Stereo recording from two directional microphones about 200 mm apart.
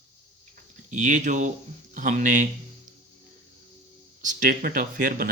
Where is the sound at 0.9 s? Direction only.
40° right (ahead or behind).